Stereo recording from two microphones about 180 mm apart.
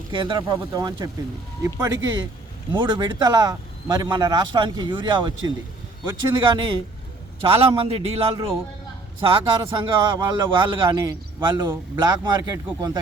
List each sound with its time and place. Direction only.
0.1 s a man's voice: 25° right (ahead or behind)
6.4 s a man's voice: 25° right (ahead or behind)